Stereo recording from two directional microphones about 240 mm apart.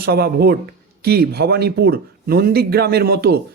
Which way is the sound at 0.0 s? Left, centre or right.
Right.